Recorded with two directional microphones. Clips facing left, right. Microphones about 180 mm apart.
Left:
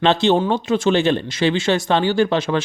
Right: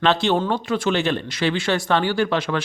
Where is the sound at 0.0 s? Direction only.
25° left (ahead or behind).